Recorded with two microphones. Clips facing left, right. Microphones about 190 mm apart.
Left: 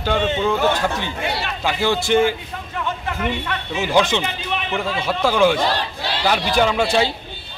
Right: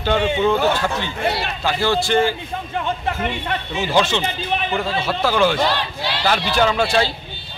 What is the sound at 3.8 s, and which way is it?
A man's voice, 15° left (ahead or behind).